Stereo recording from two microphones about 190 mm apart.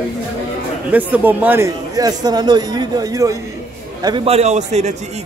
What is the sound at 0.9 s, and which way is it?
A man's voice, 10° right (ahead or behind).